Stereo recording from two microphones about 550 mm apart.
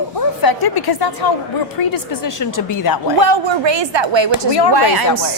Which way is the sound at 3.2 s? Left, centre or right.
Right.